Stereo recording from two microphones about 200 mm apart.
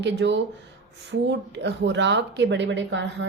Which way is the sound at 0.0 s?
60° right (ahead or behind).